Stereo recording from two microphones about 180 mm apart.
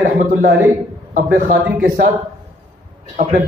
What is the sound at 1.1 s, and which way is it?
Speech, 50° right (ahead or behind).